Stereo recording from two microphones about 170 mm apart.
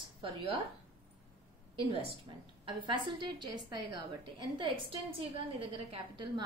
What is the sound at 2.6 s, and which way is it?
A woman's voice, 30° right (ahead or behind).